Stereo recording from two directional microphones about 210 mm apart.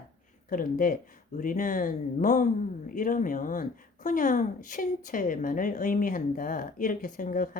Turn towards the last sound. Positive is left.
turn(degrees=40)  # may be behind; listen again after turning